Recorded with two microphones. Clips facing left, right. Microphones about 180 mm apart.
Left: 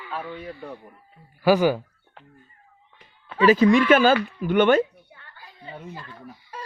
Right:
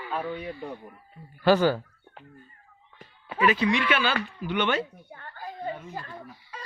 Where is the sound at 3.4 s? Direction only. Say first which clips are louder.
Left 7 dB; 40° left (ahead or behind).